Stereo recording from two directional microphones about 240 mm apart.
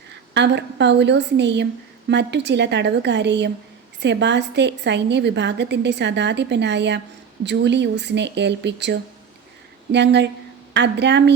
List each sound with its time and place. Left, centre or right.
0.3 s a woman's voice: right